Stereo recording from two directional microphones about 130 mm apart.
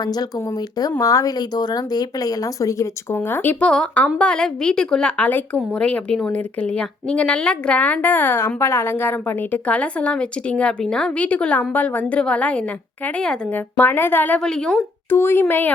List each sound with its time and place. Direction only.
0.0 s speech: 30° left (ahead or behind); by 14.8 s 5° left (ahead or behind)
15.1 s speech: 15° left (ahead or behind)